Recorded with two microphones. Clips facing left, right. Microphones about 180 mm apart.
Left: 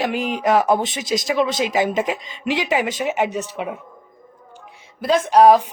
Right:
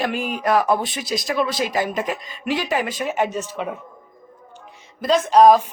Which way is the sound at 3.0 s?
15° left (ahead or behind).